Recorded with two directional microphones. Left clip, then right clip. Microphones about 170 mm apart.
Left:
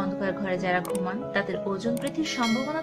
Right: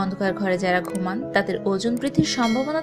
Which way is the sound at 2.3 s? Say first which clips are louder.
Right 4 dB; centre (ahead or behind).